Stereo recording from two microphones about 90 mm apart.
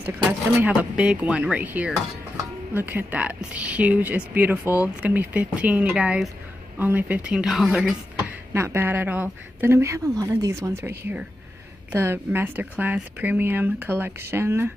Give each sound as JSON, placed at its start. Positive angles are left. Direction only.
{"t": 0.0, "sound": "speech", "side_deg": -20}
{"t": 8.2, "sound": "speech", "side_deg": -30}